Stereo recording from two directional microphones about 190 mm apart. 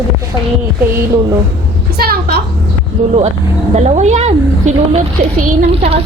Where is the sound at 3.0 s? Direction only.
40° right (ahead or behind).